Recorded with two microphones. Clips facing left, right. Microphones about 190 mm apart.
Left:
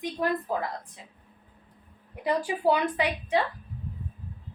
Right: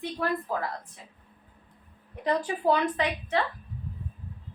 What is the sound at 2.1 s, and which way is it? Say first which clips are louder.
A woman's voice: even; 10° left (ahead or behind).